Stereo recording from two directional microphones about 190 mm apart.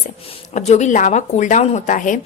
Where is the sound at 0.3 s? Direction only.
35° left (ahead or behind).